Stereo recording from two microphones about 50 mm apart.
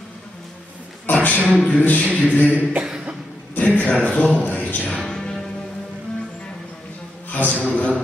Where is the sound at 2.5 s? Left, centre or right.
Right.